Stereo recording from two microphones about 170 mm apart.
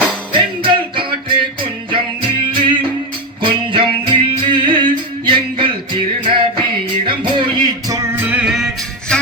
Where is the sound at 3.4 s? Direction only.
30° right (ahead or behind).